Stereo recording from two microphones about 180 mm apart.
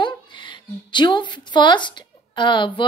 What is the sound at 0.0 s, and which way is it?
Speech, 25° left (ahead or behind).